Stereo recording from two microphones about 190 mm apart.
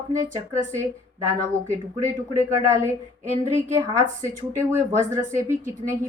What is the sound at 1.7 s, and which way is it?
A woman's voice, 15° right (ahead or behind).